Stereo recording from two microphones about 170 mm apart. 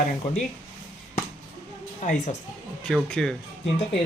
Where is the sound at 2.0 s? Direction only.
45° left (ahead or behind).